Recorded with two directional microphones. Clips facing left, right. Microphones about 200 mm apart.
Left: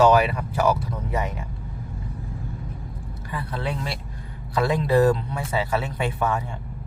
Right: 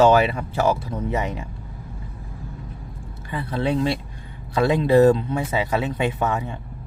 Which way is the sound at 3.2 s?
25° right (ahead or behind).